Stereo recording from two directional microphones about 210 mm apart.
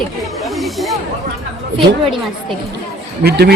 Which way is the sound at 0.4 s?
Centre (ahead or behind).